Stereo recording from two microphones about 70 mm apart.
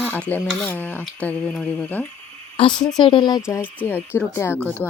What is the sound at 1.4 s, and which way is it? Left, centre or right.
Speech, centre.